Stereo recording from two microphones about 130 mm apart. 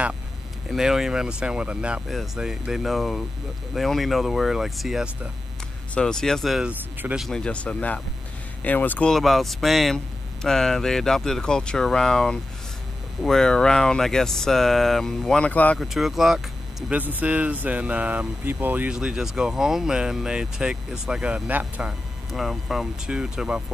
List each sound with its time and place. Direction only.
0.7 s speech: 5° right (ahead or behind)
5.9 s speech: 5° left (ahead or behind)
6.7 s speech: 15° right (ahead or behind)
7.2 s speech: 5° left (ahead or behind)
9.1 s speech: centre (ahead or behind)
15.8 s speech: centre (ahead or behind)
16.9 s speech: 15° right (ahead or behind)
22.3 s speech: centre (ahead or behind)